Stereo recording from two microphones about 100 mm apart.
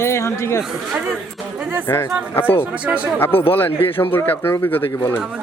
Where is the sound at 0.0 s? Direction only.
25° left (ahead or behind).